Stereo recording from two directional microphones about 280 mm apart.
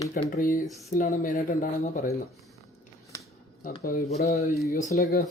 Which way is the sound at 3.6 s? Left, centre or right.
Left.